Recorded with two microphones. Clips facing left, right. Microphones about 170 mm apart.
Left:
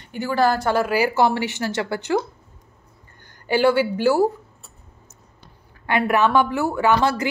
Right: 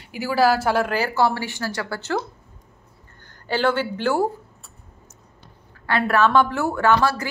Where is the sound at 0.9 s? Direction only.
15° left (ahead or behind).